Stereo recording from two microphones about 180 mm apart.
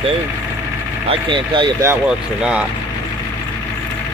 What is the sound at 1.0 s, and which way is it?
Speech, 25° right (ahead or behind).